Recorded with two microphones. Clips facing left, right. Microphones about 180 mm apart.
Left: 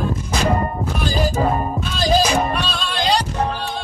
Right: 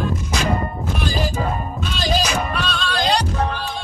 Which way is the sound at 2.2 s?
30° left (ahead or behind).